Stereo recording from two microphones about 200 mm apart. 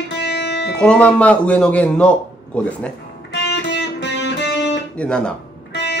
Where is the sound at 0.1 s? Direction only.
55° left (ahead or behind).